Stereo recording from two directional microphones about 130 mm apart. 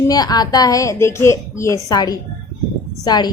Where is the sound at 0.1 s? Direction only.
30° left (ahead or behind).